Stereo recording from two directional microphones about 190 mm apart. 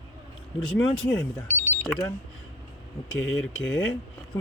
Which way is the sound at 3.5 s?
80° left.